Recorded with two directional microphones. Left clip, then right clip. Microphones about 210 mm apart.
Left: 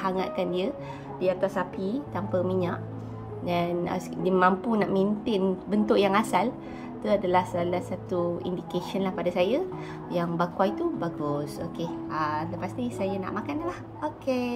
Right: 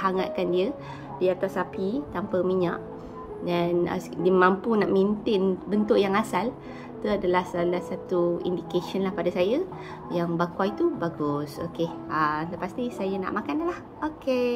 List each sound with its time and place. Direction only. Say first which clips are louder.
0.0 s a woman's voice: right 2 dB; 10° right (ahead or behind)